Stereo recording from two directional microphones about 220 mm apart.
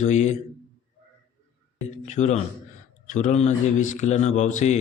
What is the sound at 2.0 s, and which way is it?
A man's voice, 35° left (ahead or behind).